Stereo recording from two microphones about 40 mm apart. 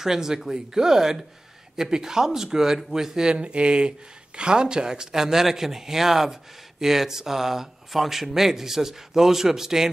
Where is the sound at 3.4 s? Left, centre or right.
Right.